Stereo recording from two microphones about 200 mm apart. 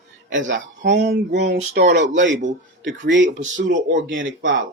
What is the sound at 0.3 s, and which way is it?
Speech, 65° right (ahead or behind).